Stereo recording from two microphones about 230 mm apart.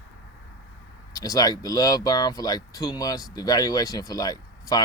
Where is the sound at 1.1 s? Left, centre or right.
Centre.